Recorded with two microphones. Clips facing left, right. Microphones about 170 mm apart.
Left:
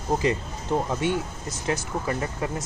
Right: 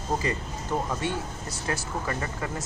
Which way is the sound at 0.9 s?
20° left (ahead or behind).